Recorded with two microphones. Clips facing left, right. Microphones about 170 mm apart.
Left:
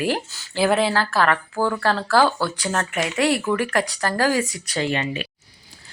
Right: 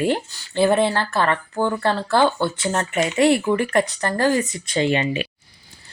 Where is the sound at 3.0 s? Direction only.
Centre (ahead or behind).